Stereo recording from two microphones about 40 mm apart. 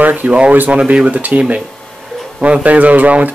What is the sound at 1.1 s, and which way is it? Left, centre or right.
Speech, right.